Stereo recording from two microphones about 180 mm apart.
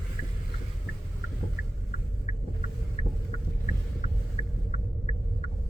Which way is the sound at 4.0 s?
40° left (ahead or behind).